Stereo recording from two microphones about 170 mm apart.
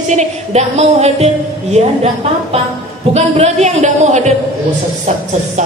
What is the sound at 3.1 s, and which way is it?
A woman's voice, 40° right (ahead or behind).